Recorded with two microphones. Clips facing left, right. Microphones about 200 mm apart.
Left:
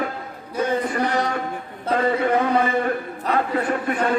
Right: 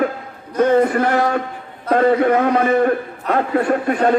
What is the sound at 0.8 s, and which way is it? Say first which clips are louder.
A man's voice: right 7 dB; 55° right (ahead or behind).